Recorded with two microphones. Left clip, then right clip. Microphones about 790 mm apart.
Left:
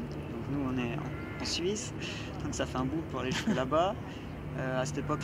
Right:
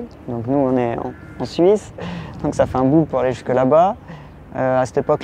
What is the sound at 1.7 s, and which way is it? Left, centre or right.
Speech, right.